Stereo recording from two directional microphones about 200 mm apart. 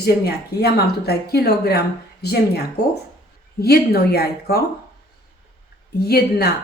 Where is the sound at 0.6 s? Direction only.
50° left (ahead or behind).